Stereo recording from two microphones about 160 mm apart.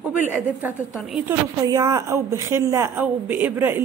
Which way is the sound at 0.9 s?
Centre (ahead or behind).